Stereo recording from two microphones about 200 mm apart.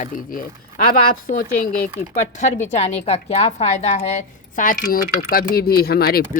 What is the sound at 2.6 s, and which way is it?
A woman's voice, 35° left (ahead or behind).